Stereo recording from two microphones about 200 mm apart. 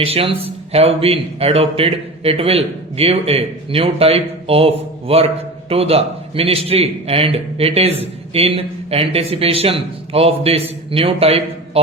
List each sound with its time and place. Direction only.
0.0 s a man's voice: 30° right (ahead or behind)